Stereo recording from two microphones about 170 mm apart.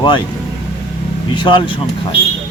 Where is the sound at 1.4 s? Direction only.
25° left (ahead or behind).